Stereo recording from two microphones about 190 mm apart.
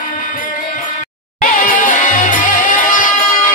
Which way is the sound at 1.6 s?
45° left (ahead or behind).